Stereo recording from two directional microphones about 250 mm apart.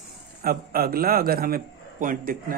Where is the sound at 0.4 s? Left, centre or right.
Right.